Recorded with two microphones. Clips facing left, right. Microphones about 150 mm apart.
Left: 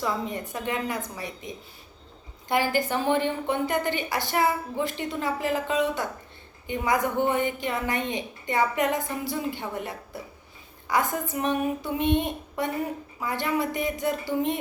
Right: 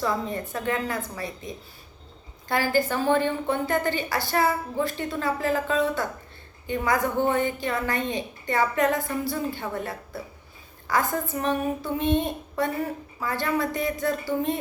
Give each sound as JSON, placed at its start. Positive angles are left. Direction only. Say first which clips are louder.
{"t": 0.0, "sound": "a woman's voice", "louder": "right 2 dB", "side_deg": 15}